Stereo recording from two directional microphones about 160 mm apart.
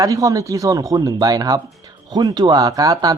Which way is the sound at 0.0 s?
20° right (ahead or behind).